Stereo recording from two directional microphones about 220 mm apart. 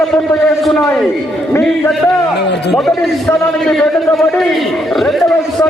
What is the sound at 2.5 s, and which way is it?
Speech, 50° left (ahead or behind).